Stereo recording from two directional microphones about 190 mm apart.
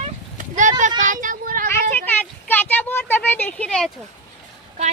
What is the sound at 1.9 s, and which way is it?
Speech, 10° left (ahead or behind).